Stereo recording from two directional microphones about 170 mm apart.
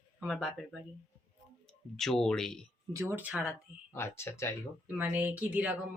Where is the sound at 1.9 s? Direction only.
Centre (ahead or behind).